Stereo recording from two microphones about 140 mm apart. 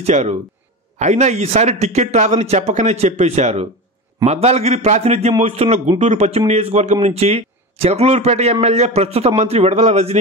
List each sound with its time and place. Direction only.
0.0 s speech: 50° right (ahead or behind)